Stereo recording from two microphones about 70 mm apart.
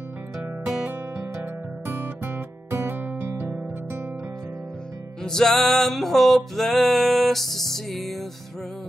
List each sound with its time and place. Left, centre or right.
0.8 s music: right
5.2 s music: centre